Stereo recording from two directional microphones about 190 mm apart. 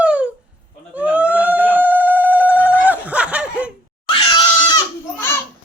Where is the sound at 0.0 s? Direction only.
5° right (ahead or behind).